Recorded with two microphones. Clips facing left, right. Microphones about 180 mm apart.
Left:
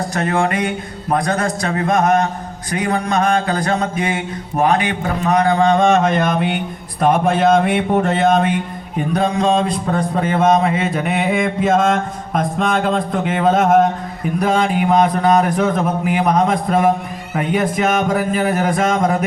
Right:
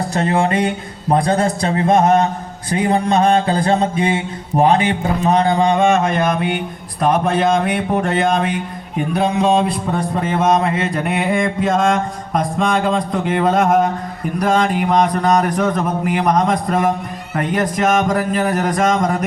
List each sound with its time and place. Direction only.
0.1 s a sound: 25° right (ahead or behind)
5.9 s mantra: centre (ahead or behind)
10.6 s mantra: centre (ahead or behind)